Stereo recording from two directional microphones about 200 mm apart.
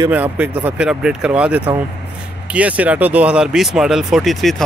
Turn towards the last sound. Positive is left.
turn(degrees=0)  # may be behind; listen again after turning